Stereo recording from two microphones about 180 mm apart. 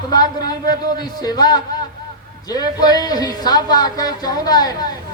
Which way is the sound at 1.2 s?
20° left (ahead or behind).